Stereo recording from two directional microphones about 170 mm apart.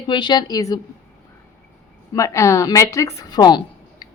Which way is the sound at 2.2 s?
20° left (ahead or behind).